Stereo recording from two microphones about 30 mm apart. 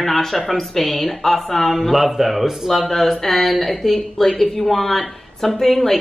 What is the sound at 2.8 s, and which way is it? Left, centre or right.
Speech, centre.